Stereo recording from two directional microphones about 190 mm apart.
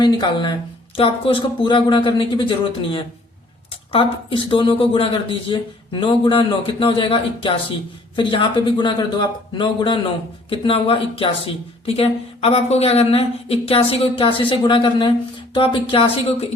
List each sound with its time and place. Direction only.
0.0 s speech: 25° left (ahead or behind)
3.9 s speech: 25° left (ahead or behind)